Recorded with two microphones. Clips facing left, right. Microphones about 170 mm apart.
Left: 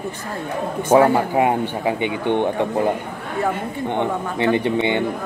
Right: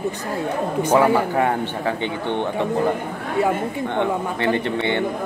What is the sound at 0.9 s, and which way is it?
A man's voice, 15° left (ahead or behind).